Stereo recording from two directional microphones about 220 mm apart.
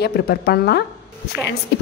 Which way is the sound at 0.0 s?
45° left (ahead or behind).